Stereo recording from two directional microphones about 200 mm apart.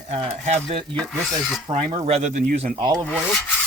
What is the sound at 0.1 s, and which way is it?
Speech, 30° right (ahead or behind).